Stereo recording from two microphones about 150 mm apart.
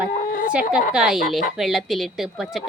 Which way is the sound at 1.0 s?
5° right (ahead or behind).